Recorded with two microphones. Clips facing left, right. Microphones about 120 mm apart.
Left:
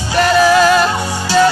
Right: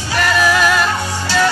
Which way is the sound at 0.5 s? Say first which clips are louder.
Left 5 dB; 30° left (ahead or behind).